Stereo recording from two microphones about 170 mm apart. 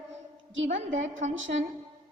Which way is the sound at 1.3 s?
90° right.